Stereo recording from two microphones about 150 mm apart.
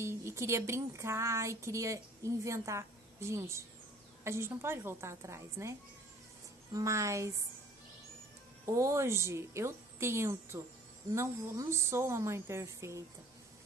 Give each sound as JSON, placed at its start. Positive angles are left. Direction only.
{"t": 0.0, "sound": "a woman's voice", "side_deg": -20}
{"t": 8.7, "sound": "a woman's voice", "side_deg": -20}